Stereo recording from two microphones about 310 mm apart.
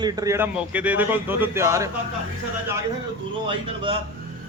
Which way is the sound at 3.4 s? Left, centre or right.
Centre.